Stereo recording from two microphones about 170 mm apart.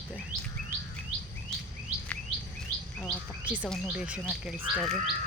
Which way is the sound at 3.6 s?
Centre (ahead or behind).